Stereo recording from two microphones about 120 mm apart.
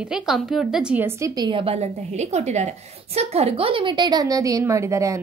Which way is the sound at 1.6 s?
60° right (ahead or behind).